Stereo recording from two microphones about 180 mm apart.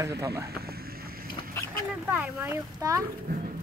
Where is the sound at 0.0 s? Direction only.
15° right (ahead or behind).